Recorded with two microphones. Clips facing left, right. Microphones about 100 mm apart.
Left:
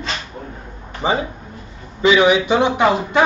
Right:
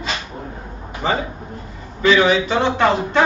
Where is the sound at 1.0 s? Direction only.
15° left (ahead or behind).